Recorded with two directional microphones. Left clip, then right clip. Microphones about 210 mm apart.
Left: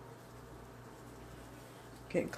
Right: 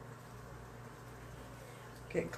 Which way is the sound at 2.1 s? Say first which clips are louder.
Left 2 dB; 35° left (ahead or behind).